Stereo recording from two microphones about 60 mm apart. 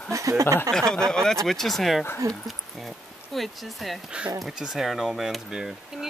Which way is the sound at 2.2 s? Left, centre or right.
Right.